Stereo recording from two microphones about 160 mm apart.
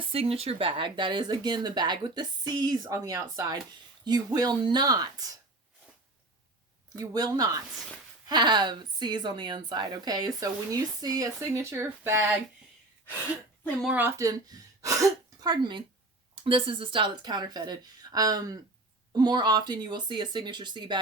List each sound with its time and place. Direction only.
0.1 s a woman's voice: 35° right (ahead or behind)
6.9 s a woman's voice: 25° right (ahead or behind)
13.8 s speech: 10° right (ahead or behind)
15.4 s a woman's voice: 30° right (ahead or behind)